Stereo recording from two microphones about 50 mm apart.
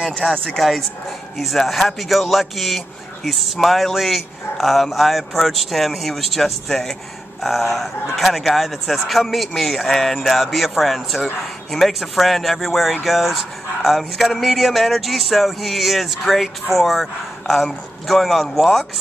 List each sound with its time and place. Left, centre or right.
0.2 s speech: centre